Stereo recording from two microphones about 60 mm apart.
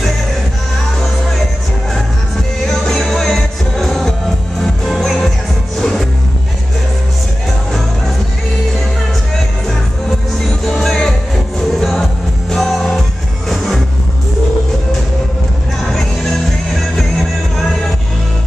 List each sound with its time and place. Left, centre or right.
2.7 s music: centre
10.6 s music: centre
15.9 s music: centre